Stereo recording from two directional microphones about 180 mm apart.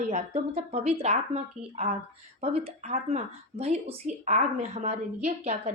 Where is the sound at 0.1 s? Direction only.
35° right (ahead or behind).